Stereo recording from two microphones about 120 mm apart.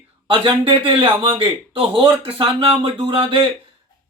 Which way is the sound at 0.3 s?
50° right (ahead or behind).